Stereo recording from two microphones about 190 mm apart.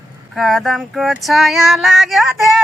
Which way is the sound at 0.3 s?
Centre (ahead or behind).